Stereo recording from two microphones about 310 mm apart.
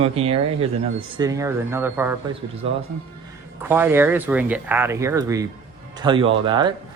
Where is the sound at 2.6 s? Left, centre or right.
Centre.